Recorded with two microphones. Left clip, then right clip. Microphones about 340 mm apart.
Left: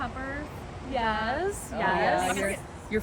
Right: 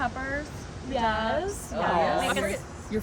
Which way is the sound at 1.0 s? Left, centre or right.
Right.